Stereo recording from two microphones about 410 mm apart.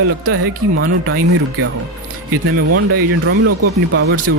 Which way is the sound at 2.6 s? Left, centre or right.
Right.